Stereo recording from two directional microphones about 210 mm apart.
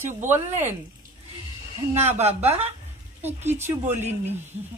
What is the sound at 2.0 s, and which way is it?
Speech, 30° right (ahead or behind).